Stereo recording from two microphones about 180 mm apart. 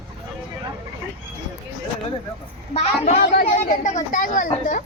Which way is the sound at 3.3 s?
55° left (ahead or behind).